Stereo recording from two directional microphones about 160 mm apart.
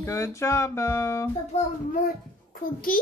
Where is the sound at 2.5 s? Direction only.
65° left (ahead or behind).